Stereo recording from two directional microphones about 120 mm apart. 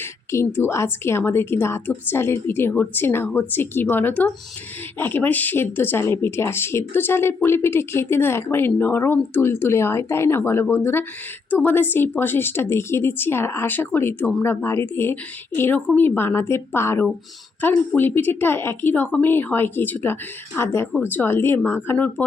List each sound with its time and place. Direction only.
0.0 s a woman's voice: 20° left (ahead or behind)